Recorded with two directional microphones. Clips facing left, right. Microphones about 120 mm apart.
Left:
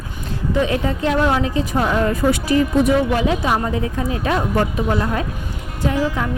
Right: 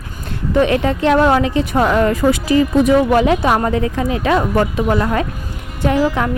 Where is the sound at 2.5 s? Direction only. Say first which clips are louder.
Right 3 dB; 90° right.